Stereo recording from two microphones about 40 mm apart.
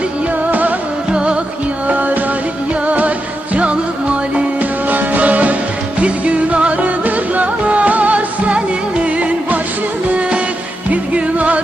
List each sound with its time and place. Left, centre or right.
1.1 s music: right
1.9 s music: right
4.6 s music: right